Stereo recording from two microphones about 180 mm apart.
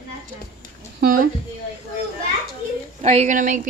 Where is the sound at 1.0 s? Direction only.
55° right (ahead or behind).